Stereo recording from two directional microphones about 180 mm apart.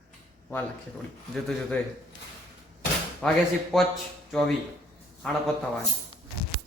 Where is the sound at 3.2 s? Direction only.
Centre (ahead or behind).